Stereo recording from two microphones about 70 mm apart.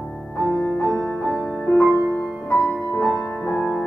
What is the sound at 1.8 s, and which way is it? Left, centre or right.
Music, right.